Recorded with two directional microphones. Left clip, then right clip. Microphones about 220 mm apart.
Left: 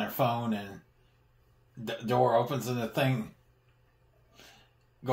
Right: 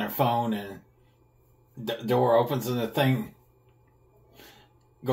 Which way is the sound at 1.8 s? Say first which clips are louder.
Right 3 dB; 15° left (ahead or behind).